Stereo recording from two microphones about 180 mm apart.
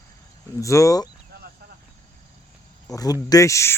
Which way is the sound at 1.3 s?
55° right (ahead or behind).